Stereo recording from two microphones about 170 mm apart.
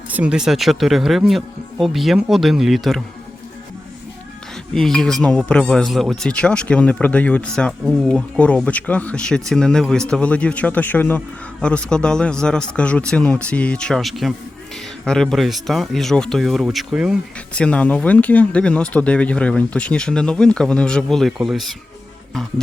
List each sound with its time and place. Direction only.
0.1 s speech: 5° right (ahead or behind)
4.7 s speech: 5° left (ahead or behind)
17.5 s speech: 5° left (ahead or behind)